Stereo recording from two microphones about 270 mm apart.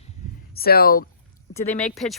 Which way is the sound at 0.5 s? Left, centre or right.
Left.